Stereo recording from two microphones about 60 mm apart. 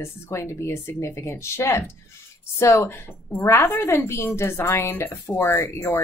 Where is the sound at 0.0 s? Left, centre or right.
Left.